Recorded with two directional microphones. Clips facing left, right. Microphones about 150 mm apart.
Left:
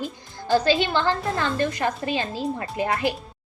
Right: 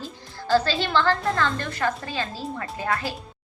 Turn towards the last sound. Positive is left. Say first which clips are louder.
# left 4 dB
turn(degrees=20)  # may be behind; listen again after turning